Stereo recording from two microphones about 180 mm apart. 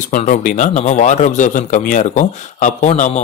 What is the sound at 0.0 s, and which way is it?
A man's voice, 45° left (ahead or behind).